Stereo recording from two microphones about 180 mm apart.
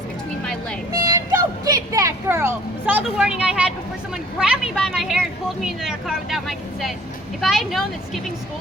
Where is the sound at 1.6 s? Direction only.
20° right (ahead or behind).